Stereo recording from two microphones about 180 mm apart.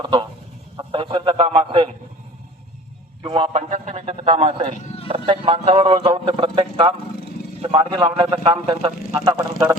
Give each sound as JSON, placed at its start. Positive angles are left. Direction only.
{"t": 0.0, "sound": "a man's voice", "side_deg": -25}
{"t": 3.2, "sound": "a man's voice", "side_deg": -30}